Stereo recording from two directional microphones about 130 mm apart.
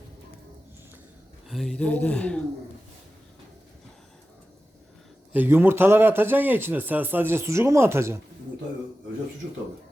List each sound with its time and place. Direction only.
1.5 s speech: centre (ahead or behind)
5.3 s a man's voice: 15° right (ahead or behind)